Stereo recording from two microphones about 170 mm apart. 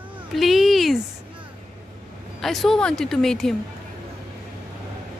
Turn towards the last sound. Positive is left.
turn(degrees=0)  # may be behind; listen again after turning